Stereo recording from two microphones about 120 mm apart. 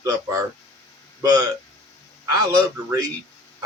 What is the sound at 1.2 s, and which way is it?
A man's voice, 30° right (ahead or behind).